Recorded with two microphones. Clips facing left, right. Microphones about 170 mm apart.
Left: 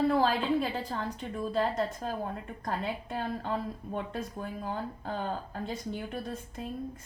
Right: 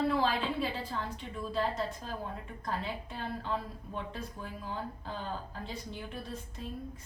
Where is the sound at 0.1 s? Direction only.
45° left (ahead or behind).